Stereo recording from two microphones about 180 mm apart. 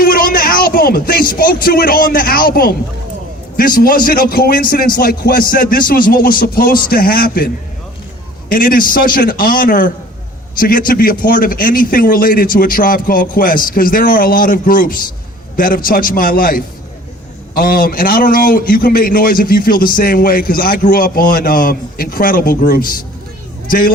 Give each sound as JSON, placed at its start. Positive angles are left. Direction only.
{"t": 0.0, "sound": "a man's voice", "side_deg": 50}